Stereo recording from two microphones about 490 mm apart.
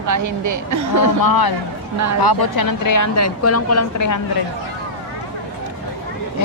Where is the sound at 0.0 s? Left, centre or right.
Right.